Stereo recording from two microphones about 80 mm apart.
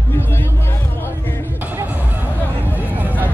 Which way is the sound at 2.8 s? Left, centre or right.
Right.